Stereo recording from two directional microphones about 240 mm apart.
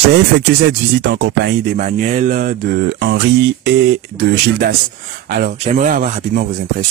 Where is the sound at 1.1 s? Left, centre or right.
Right.